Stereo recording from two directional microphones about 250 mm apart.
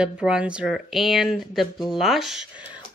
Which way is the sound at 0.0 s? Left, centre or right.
Centre.